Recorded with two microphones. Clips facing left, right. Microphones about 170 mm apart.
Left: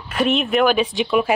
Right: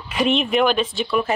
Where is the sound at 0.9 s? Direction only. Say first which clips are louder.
Left 3 dB; 15° left (ahead or behind).